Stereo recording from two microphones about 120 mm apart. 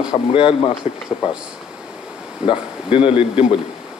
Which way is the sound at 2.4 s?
45° left (ahead or behind).